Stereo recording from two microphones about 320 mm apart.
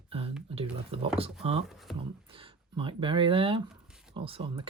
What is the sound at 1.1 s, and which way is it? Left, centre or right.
Speech, centre.